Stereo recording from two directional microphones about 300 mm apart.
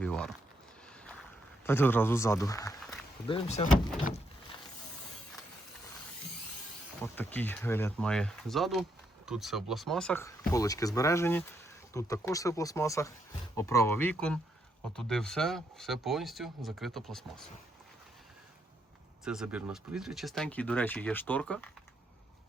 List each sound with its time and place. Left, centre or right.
0.0 s a sound: centre
1.6 s speech: centre
7.0 s speech: centre
19.2 s speech: centre